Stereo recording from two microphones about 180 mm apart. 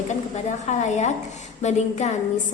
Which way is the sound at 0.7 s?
40° left (ahead or behind).